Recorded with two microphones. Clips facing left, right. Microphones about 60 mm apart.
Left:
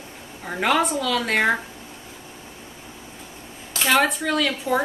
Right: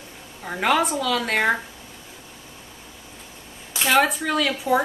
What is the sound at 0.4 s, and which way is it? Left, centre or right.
Speech, centre.